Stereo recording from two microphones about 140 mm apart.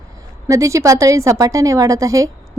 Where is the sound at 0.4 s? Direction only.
20° right (ahead or behind).